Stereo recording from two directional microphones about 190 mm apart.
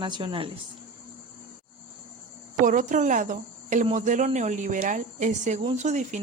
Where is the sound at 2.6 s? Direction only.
45° right (ahead or behind).